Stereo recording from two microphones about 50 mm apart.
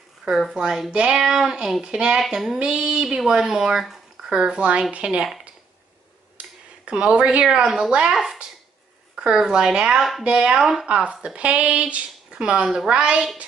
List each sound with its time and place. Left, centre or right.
0.6 s speech: centre
6.9 s speech: right
10.6 s speech: centre